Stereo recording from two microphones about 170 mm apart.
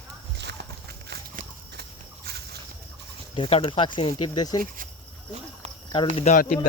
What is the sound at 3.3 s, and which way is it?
Speech, 35° left (ahead or behind).